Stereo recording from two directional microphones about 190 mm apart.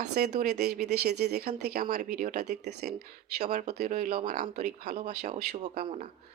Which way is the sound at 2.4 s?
60° right (ahead or behind).